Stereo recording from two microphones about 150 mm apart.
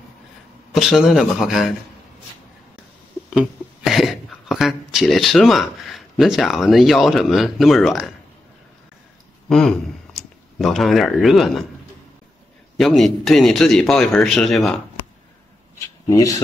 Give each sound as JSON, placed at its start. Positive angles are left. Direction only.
{"t": 0.7, "sound": "a man's voice", "side_deg": -5}
{"t": 3.3, "sound": "speech", "side_deg": 0}
{"t": 9.5, "sound": "speech", "side_deg": 5}
{"t": 12.7, "sound": "a man's voice", "side_deg": 0}
{"t": 16.1, "sound": "speech", "side_deg": 20}